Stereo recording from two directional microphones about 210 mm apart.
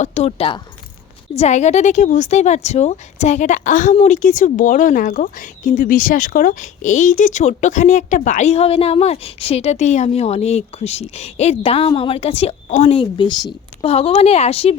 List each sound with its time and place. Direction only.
0.0 s a woman's voice: 30° left (ahead or behind)